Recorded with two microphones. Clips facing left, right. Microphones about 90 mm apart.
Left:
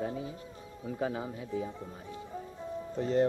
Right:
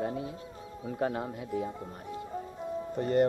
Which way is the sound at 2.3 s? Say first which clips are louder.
Right 3 dB; 10° right (ahead or behind).